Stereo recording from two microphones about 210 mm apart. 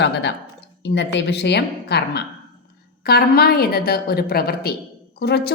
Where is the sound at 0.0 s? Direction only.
55° left (ahead or behind).